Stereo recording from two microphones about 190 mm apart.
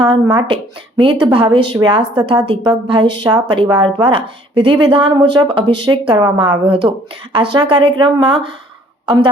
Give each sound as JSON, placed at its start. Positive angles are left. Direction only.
{"t": 0.3, "sound": "speech", "side_deg": -25}